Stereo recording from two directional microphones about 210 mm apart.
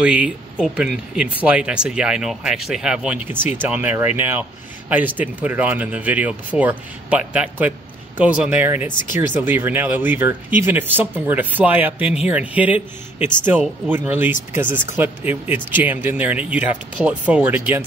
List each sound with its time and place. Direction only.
0.0 s speech: 5° right (ahead or behind)